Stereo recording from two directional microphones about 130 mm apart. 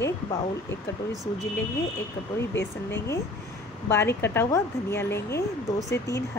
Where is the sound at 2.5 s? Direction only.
20° left (ahead or behind).